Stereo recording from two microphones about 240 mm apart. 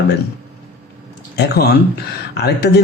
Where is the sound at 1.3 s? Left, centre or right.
Left.